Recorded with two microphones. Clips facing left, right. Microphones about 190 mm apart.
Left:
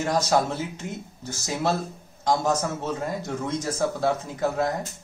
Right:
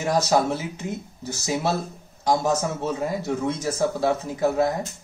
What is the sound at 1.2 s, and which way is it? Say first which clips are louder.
Speech: right 2 dB; 10° right (ahead or behind).